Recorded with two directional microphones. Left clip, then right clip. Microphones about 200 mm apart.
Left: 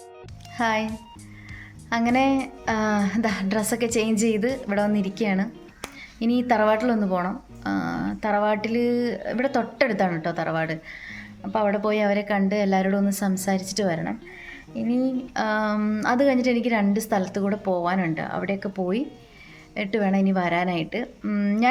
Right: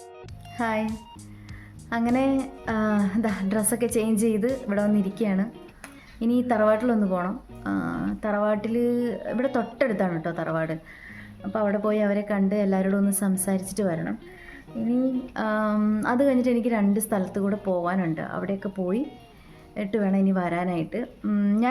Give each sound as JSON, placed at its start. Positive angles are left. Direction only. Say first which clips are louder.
{"t": 0.6, "sound": "a woman's voice", "louder": "left 3 dB", "side_deg": -15}
{"t": 2.1, "sound": "a woman's voice", "louder": "left 3 dB", "side_deg": -15}
{"t": 4.4, "sound": "a woman's voice", "louder": "left 1 dB", "side_deg": 0}
{"t": 4.9, "sound": "a woman's voice", "louder": "left 1 dB", "side_deg": -15}